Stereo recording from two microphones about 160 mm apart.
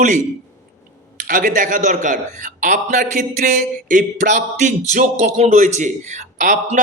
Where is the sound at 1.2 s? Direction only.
55° right (ahead or behind).